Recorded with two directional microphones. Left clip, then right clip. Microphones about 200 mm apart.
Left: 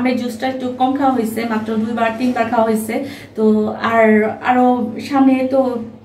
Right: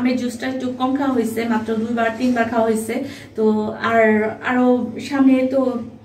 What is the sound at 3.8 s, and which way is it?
Speech, 5° left (ahead or behind).